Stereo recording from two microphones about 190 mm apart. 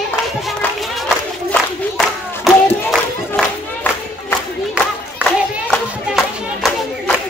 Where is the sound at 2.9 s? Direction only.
5° left (ahead or behind).